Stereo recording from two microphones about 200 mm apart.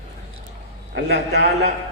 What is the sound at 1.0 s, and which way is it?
Speech, 55° right (ahead or behind).